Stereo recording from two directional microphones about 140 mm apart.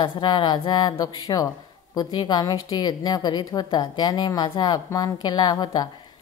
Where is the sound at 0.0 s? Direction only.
30° left (ahead or behind).